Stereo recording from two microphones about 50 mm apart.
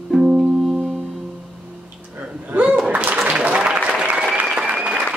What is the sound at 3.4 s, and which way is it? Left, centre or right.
Applause, right.